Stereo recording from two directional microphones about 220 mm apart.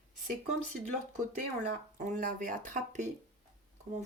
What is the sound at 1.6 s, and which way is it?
Speech, 35° right (ahead or behind).